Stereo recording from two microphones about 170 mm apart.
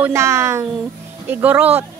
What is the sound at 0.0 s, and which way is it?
A child's voice, 15° right (ahead or behind).